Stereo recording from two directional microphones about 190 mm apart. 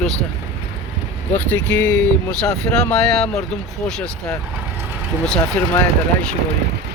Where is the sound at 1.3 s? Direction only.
10° left (ahead or behind).